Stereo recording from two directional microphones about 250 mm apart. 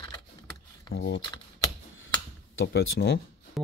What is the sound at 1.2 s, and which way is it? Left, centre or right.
Typing, centre.